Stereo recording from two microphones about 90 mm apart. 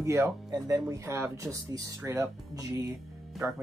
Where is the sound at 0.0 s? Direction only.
30° right (ahead or behind).